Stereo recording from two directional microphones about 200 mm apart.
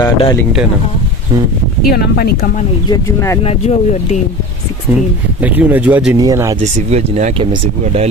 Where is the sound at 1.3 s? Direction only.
20° right (ahead or behind).